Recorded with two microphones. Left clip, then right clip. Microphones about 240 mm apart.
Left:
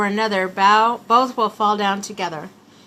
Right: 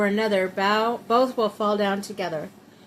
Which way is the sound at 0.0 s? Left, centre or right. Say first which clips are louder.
Left 2 dB; centre.